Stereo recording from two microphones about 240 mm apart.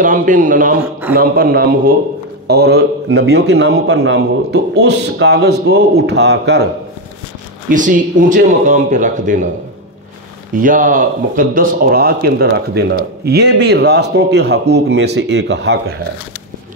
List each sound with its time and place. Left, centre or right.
0.0 s a man's voice: right
7.7 s speech: right
10.5 s a man's voice: right